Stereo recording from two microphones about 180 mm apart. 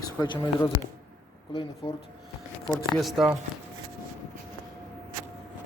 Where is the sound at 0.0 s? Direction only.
25° left (ahead or behind).